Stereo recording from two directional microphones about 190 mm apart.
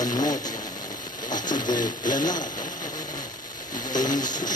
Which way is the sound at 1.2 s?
20° left (ahead or behind).